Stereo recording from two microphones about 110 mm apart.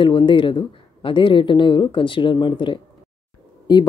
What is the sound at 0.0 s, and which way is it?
Speech, 50° left (ahead or behind).